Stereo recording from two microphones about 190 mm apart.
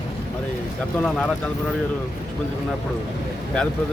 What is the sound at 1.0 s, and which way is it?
Speech, 5° left (ahead or behind).